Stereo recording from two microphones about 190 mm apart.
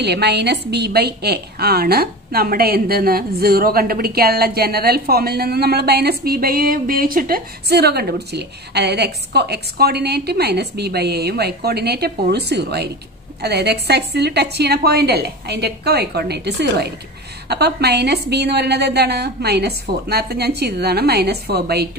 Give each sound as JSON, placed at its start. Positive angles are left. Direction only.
{"t": 0.0, "sound": "a woman's voice", "side_deg": -60}